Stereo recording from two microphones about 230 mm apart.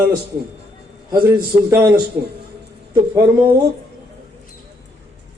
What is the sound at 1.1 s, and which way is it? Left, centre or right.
Speech, centre.